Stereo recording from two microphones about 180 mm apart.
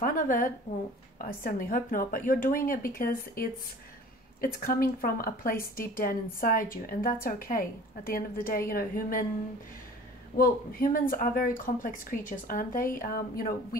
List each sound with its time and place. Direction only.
0.0 s a woman's voice: 50° left (ahead or behind)
10.3 s a woman's voice: 55° left (ahead or behind)